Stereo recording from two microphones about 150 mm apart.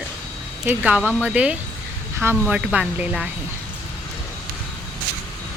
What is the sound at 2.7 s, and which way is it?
Speech, 5° right (ahead or behind).